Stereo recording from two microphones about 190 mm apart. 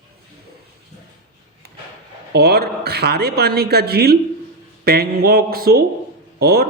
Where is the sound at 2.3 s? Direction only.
55° right (ahead or behind).